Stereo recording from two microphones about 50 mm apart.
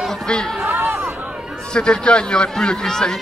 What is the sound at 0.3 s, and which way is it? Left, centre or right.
Speech, centre.